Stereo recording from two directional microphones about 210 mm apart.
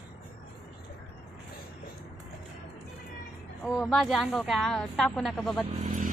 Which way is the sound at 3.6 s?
5° left (ahead or behind).